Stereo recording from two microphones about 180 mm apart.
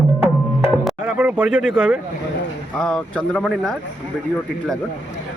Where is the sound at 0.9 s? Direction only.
5° right (ahead or behind).